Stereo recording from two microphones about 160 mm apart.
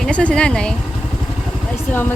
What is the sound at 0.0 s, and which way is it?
Speech, 5° left (ahead or behind).